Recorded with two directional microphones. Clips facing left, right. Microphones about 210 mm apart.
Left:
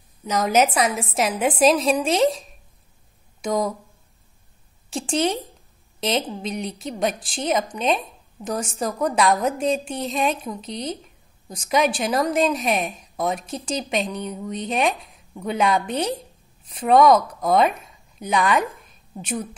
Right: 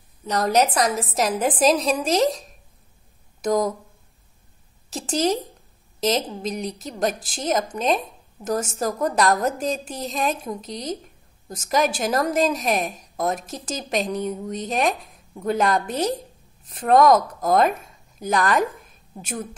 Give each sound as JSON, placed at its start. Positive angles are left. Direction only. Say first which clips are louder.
{"t": 0.2, "sound": "a woman's voice", "louder": "left 1 dB", "side_deg": 0}
{"t": 4.8, "sound": "a woman's voice", "louder": "even", "side_deg": 0}